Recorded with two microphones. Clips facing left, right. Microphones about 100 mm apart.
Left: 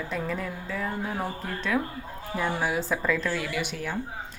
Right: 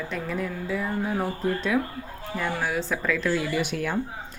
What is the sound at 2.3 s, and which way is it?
Speech, 10° left (ahead or behind).